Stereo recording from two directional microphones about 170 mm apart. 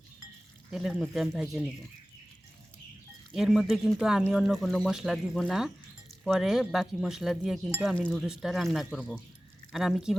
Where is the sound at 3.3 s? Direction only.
Centre (ahead or behind).